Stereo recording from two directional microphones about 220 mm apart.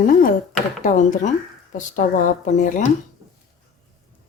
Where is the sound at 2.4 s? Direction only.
35° left (ahead or behind).